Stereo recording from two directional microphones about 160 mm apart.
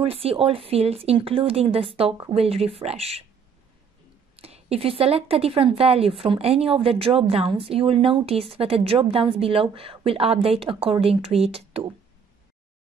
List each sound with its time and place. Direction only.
0.0 s speech: 40° right (ahead or behind)
4.4 s speech: 40° right (ahead or behind)